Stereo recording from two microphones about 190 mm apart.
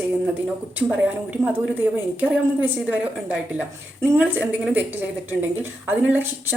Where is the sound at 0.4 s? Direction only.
5° right (ahead or behind).